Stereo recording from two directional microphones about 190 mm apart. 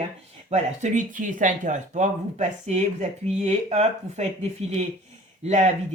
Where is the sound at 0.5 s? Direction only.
40° right (ahead or behind).